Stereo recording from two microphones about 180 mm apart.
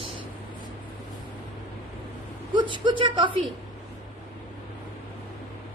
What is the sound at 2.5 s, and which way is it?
Speech, 25° right (ahead or behind).